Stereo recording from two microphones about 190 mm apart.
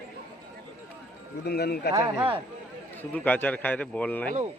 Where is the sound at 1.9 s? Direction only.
10° right (ahead or behind).